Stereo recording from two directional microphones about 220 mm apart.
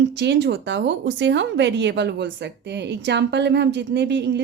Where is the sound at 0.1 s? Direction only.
50° right (ahead or behind).